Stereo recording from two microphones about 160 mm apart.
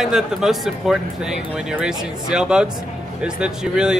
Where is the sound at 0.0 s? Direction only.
Centre (ahead or behind).